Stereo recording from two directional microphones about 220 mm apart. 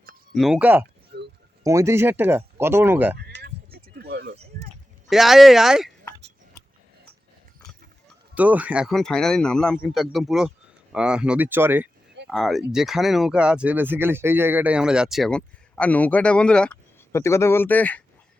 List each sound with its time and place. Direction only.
0.3 s speech: centre (ahead or behind)
1.1 s a sound: 45° right (ahead or behind)
1.6 s speech: 15° right (ahead or behind)
3.2 s a sound: 45° right (ahead or behind)
5.0 s speech: centre (ahead or behind)
8.4 s speech: 5° right (ahead or behind)
12.3 s speech: centre (ahead or behind)